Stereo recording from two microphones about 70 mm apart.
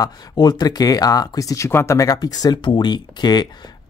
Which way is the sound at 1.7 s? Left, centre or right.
Left.